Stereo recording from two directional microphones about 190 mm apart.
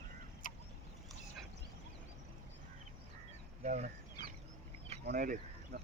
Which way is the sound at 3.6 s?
40° right (ahead or behind).